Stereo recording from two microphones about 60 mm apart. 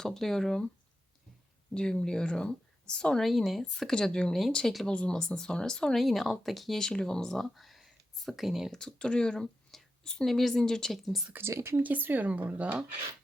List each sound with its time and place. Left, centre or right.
0.0 s speech: centre
1.7 s speech: centre
4.9 s speech: centre
8.7 s speech: centre
11.3 s speech: right
11.8 s speech: right